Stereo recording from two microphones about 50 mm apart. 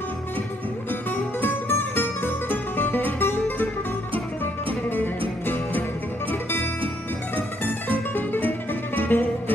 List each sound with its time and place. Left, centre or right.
1.1 s music: left
4.8 s music: left
8.3 s music: left